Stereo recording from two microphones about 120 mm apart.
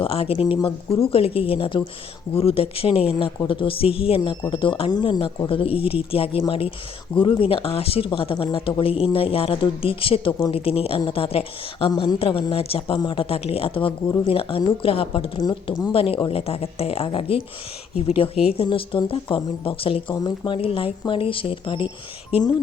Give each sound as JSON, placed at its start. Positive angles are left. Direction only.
{"t": 0.0, "sound": "speech", "side_deg": 50}
{"t": 11.9, "sound": "speech", "side_deg": 35}
{"t": 20.1, "sound": "speech", "side_deg": 40}
{"t": 20.6, "sound": "speech", "side_deg": 50}